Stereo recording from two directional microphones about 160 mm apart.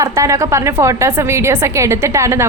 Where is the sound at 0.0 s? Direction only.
20° right (ahead or behind).